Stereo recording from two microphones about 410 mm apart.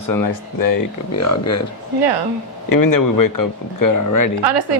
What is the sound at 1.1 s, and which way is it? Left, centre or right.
Speech, left.